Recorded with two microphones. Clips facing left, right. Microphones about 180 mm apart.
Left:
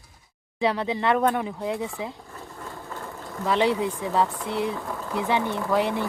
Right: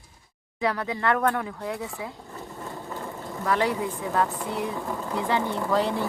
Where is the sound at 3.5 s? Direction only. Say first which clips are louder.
Left 3 dB; 20° left (ahead or behind).